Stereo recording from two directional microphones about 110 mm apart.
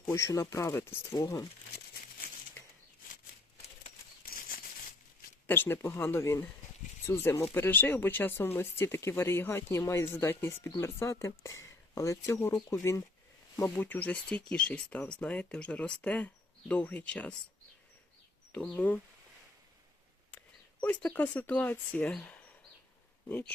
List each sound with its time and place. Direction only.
0.1 s speech: 30° left (ahead or behind)
5.5 s speech: 20° left (ahead or behind)
13.7 s speech: 15° left (ahead or behind)
18.7 s speech: 15° left (ahead or behind)
20.8 s speech: 10° left (ahead or behind)